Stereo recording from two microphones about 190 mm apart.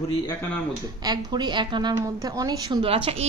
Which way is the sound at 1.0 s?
20° right (ahead or behind).